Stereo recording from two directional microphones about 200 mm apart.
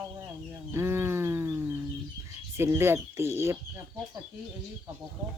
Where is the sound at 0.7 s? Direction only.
10° right (ahead or behind).